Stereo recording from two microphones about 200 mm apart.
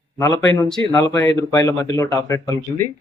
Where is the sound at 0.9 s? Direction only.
15° left (ahead or behind).